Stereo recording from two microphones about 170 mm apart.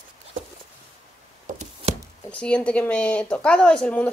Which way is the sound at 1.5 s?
55° right (ahead or behind).